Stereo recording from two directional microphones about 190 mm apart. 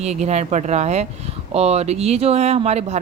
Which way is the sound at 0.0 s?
35° right (ahead or behind).